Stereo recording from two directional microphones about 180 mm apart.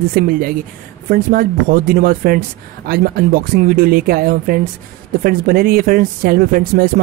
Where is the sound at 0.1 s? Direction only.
50° right (ahead or behind).